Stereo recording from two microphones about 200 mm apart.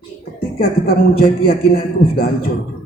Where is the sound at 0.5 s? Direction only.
50° left (ahead or behind).